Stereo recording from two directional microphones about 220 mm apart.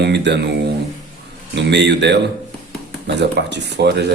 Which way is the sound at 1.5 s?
50° right (ahead or behind).